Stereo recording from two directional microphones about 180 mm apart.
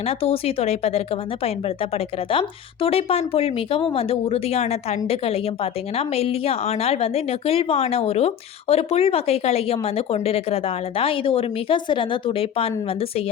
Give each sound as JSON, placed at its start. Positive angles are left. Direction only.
{"t": 0.0, "sound": "a woman's voice", "side_deg": 35}